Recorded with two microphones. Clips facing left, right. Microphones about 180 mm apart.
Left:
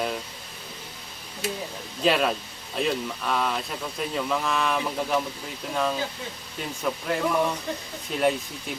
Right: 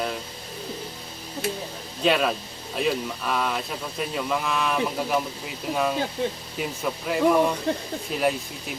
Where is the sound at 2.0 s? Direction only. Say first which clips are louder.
Right 1 dB; centre (ahead or behind).